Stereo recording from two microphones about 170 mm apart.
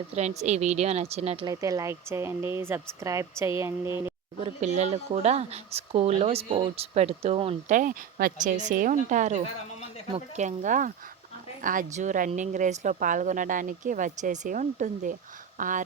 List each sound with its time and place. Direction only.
0.2 s speech: 40° right (ahead or behind)
1.5 s speech: 20° right (ahead or behind)
4.4 s speech: 40° right (ahead or behind)
7.8 s speech: 55° right (ahead or behind)